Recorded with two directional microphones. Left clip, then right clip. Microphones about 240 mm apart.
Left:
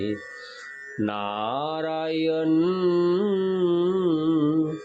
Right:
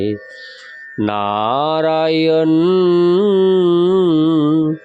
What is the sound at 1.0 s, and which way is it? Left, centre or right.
Mantra, right.